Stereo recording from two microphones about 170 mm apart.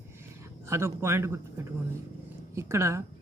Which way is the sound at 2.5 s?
15° right (ahead or behind).